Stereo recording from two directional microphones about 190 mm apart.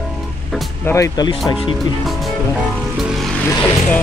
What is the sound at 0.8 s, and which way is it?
Speech, 15° left (ahead or behind).